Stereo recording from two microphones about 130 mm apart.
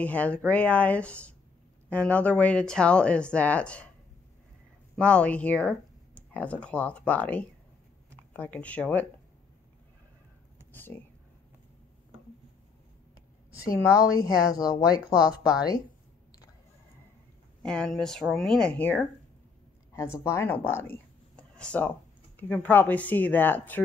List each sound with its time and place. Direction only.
0.0 s speech: 10° left (ahead or behind)
4.9 s speech: 10° left (ahead or behind)
10.7 s speech: 15° left (ahead or behind)
14.2 s speech: 25° left (ahead or behind)
15.1 s a woman's voice: 5° right (ahead or behind)
17.6 s a woman's voice: 5° left (ahead or behind)
21.4 s a sound: 10° left (ahead or behind)
22.4 s speech: 15° left (ahead or behind)